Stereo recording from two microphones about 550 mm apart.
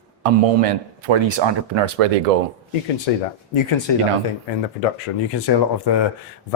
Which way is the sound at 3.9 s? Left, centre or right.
Left.